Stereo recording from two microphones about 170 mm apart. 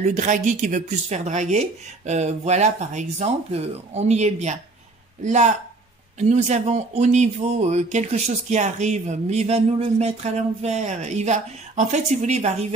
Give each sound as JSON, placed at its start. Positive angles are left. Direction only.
{"t": 0.0, "sound": "speech", "side_deg": -45}